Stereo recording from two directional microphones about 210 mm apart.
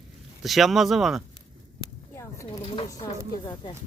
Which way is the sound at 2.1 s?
15° left (ahead or behind).